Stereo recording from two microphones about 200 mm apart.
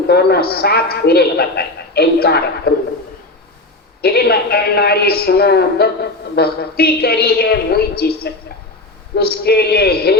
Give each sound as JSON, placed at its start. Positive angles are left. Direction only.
{"t": 0.1, "sound": "a man's voice", "side_deg": 50}
{"t": 4.0, "sound": "a man's voice", "side_deg": 50}